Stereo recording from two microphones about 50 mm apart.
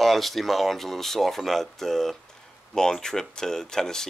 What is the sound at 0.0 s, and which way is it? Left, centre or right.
A man's voice, centre.